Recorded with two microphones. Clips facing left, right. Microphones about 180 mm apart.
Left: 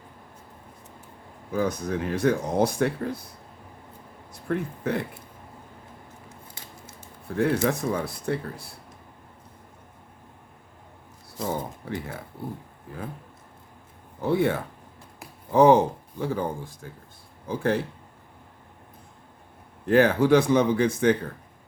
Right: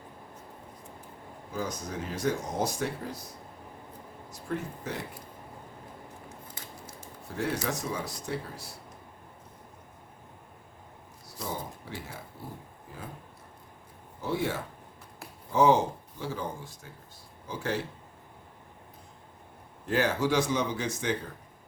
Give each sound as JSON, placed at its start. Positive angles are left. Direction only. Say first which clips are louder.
{"t": 1.5, "sound": "speech", "louder": "left 8 dB", "side_deg": 60}
{"t": 4.3, "sound": "speech", "louder": "left 6 dB", "side_deg": 60}
{"t": 7.3, "sound": "speech", "louder": "left 8 dB", "side_deg": 55}
{"t": 11.3, "sound": "speech", "louder": "left 7 dB", "side_deg": 55}
{"t": 14.2, "sound": "speech", "louder": "left 7 dB", "side_deg": 60}
{"t": 19.9, "sound": "speech", "louder": "left 9 dB", "side_deg": 55}